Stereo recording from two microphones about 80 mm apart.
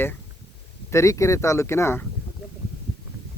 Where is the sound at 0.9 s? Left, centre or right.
Left.